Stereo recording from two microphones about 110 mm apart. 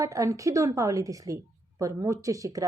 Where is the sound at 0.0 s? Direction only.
30° right (ahead or behind).